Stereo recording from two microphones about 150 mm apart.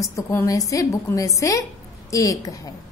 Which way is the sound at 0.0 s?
20° left (ahead or behind).